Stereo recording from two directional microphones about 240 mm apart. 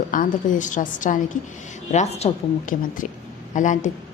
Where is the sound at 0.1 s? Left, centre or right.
Left.